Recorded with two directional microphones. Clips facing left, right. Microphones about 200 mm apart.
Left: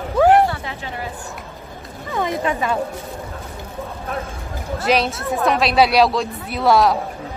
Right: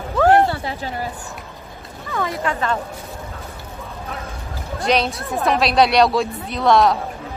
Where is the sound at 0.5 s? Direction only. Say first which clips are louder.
Right 3 dB; 35° right (ahead or behind).